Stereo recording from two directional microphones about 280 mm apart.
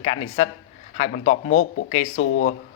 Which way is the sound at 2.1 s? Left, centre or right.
Left.